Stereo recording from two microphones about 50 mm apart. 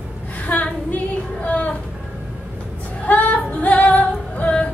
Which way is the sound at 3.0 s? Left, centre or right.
Left.